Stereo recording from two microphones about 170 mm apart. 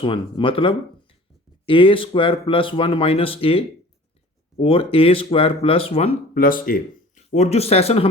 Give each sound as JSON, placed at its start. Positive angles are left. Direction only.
{"t": 0.0, "sound": "speech", "side_deg": 30}
{"t": 6.3, "sound": "speech", "side_deg": 55}
{"t": 7.3, "sound": "speech", "side_deg": 40}